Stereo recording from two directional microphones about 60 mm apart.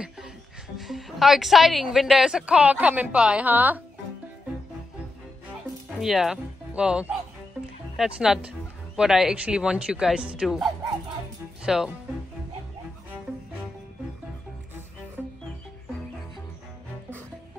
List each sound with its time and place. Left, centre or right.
0.7 s a woman's voice: centre
2.4 s a woman's voice: right
3.2 s speech: centre
3.4 s a woman's voice: right
5.9 s a woman's voice: centre
15.2 s music: right